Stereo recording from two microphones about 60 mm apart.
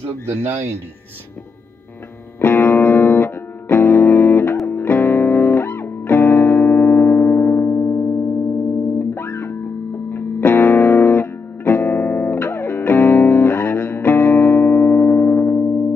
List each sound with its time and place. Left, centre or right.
2.4 s music: left